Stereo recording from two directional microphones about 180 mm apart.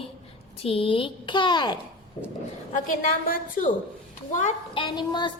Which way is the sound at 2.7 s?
45° left (ahead or behind).